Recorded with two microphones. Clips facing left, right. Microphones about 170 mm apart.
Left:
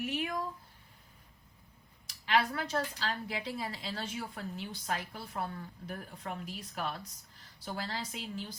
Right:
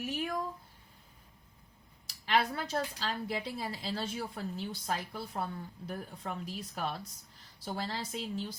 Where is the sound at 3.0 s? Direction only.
35° right (ahead or behind).